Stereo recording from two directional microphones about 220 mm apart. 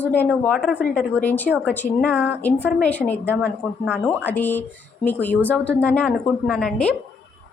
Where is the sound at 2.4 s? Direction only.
5° left (ahead or behind).